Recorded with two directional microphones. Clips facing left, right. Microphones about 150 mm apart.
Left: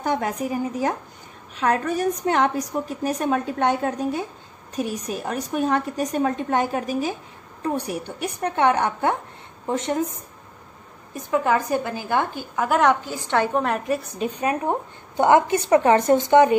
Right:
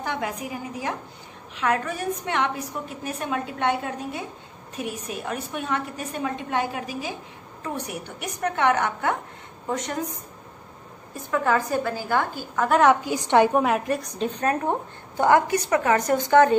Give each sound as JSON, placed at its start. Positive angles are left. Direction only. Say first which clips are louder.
{"t": 0.0, "sound": "a woman's voice", "louder": "left 5 dB", "side_deg": 40}
{"t": 7.6, "sound": "a woman's voice", "louder": "left 6 dB", "side_deg": 35}
{"t": 11.1, "sound": "a woman's voice", "louder": "left 2 dB", "side_deg": 15}
{"t": 12.6, "sound": "a woman's voice", "louder": "right 1 dB", "side_deg": 0}
{"t": 13.0, "sound": "a woman's voice", "louder": "right 4 dB", "side_deg": -15}